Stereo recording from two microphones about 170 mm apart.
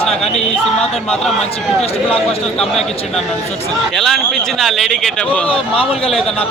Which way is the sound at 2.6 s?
Centre (ahead or behind).